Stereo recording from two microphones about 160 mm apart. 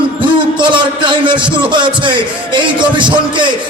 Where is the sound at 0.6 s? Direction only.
30° right (ahead or behind).